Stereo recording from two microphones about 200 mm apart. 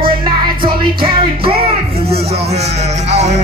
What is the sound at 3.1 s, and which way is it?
Music, 35° right (ahead or behind).